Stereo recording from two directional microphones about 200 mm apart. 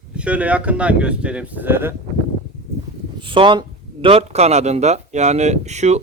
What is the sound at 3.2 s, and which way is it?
A man's voice, 25° right (ahead or behind).